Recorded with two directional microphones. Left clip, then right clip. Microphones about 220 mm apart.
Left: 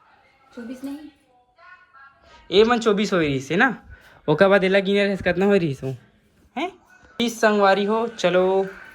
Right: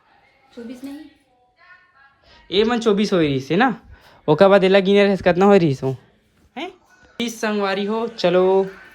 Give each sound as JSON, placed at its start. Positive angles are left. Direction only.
{"t": 0.6, "sound": "a woman's voice", "side_deg": 0}
{"t": 2.3, "sound": "speech", "side_deg": -10}
{"t": 6.5, "sound": "a sound", "side_deg": -10}
{"t": 7.2, "sound": "speech", "side_deg": -10}